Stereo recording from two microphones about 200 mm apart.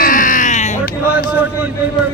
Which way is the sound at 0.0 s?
40° left (ahead or behind).